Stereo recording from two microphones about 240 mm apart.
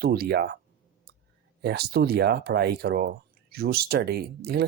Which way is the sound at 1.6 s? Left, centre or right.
Right.